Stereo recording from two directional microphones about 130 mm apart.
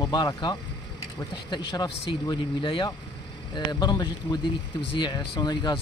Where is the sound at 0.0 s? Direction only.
35° left (ahead or behind).